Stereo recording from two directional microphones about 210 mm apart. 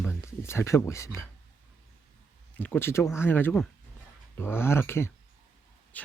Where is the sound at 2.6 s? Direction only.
10° left (ahead or behind).